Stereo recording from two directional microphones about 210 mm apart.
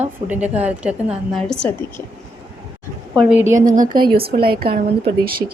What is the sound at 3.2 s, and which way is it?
Speech, 5° right (ahead or behind).